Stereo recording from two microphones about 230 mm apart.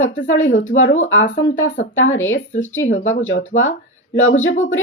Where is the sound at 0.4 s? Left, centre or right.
Left.